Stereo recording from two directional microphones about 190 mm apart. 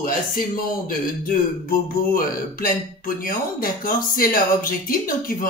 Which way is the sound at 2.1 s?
50° left (ahead or behind).